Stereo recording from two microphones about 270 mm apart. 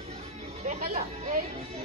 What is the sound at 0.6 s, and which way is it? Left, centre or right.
Speech, right.